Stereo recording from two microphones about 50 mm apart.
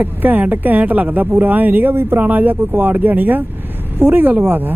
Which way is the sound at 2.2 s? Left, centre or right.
Right.